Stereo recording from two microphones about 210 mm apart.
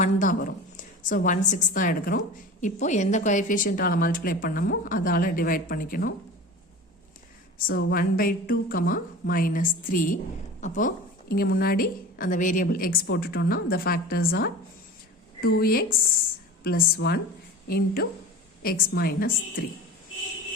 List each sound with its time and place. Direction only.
0.0 s a woman's voice: 40° left (ahead or behind)
7.7 s a woman's voice: 50° left (ahead or behind)